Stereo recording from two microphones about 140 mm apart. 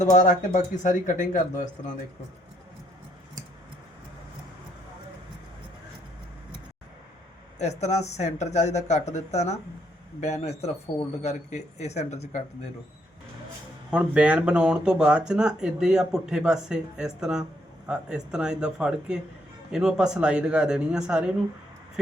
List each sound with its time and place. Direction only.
0.0 s speech: 65° left (ahead or behind)
7.6 s speech: 50° left (ahead or behind)
13.9 s speech: 10° right (ahead or behind)